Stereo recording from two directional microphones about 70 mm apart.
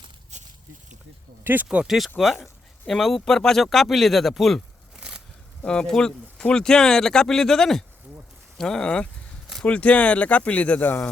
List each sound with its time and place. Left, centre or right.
1.7 s speech: centre
4.9 s a sound: centre
5.6 s speech: centre